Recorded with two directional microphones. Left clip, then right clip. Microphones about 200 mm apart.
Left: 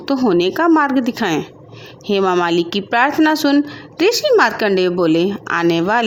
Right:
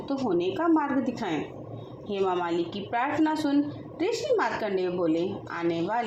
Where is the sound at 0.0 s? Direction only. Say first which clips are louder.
Left 12 dB; 50° left (ahead or behind).